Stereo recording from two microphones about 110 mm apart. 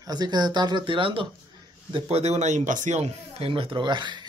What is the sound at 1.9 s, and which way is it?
Speech, 70° right (ahead or behind).